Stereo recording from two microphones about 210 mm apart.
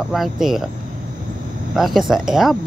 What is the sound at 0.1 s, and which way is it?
Speech, centre (ahead or behind).